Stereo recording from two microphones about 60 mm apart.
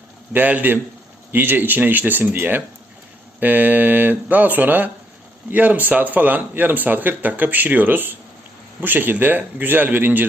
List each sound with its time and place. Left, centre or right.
0.3 s speech: right